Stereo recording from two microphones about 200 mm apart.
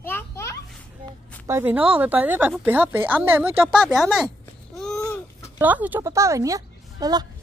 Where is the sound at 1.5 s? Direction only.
10° right (ahead or behind).